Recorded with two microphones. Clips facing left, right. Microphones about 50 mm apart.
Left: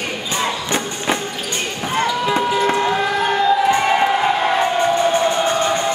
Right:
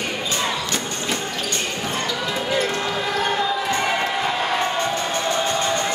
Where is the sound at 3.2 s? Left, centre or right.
Centre.